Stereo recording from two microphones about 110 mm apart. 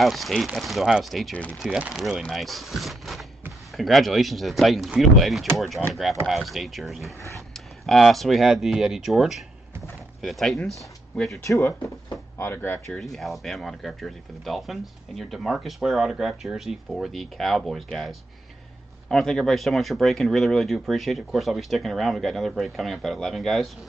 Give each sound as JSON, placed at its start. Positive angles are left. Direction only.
{"t": 0.0, "sound": "speech", "side_deg": 0}
{"t": 11.4, "sound": "speech", "side_deg": 30}
{"t": 13.0, "sound": "speech", "side_deg": 0}